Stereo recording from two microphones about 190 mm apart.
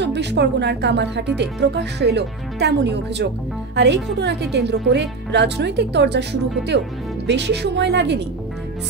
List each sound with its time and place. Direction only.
0.0 s speech: 65° right (ahead or behind)